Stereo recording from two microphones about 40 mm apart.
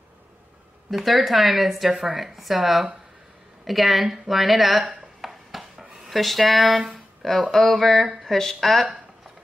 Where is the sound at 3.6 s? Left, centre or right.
Centre.